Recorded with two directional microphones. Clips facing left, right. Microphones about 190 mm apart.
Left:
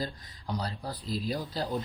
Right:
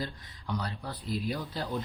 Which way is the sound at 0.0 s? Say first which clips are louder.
Left 2 dB; 35° left (ahead or behind).